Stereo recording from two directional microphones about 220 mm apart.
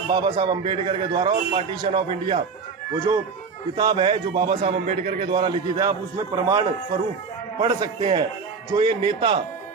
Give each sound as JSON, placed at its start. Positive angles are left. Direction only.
{"t": 0.1, "sound": "a man's voice", "side_deg": -20}
{"t": 3.8, "sound": "a man's voice", "side_deg": -20}